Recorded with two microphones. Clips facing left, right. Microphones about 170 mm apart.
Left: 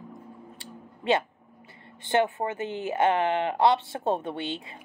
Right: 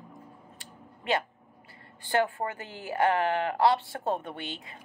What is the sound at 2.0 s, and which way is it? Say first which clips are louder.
Speech: left 3 dB; 20° left (ahead or behind).